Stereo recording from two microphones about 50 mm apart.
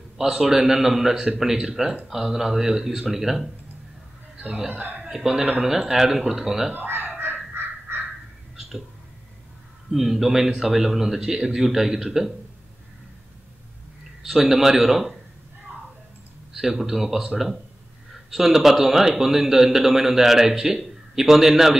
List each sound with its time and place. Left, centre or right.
0.2 s a man's voice: centre
4.4 s a man's voice: right
5.1 s a man's voice: centre
6.7 s crow: right
7.5 s fowl: right
8.5 s a sound: centre
9.9 s a man's voice: centre
14.5 s a man's voice: centre
16.5 s a man's voice: centre
18.3 s a man's voice: centre